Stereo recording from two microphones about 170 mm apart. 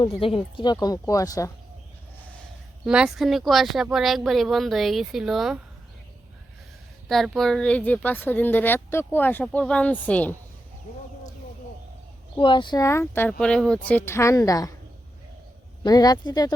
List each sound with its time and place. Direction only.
0.0 s speech: 30° left (ahead or behind)
2.8 s speech: 5° right (ahead or behind)
7.1 s speech: centre (ahead or behind)
12.4 s speech: 30° left (ahead or behind)
15.8 s speech: 20° left (ahead or behind)